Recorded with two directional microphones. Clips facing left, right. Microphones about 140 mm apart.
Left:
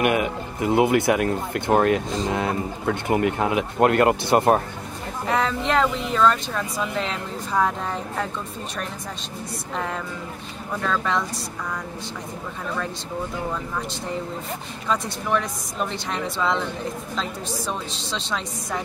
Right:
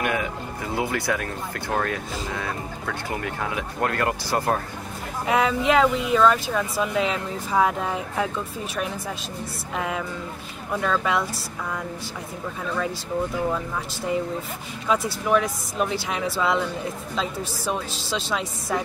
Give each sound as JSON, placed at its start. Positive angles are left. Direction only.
{"t": 0.0, "sound": "speech", "side_deg": 20}
{"t": 5.2, "sound": "speech", "side_deg": -5}
{"t": 9.8, "sound": "speech", "side_deg": -5}
{"t": 14.9, "sound": "speech", "side_deg": -5}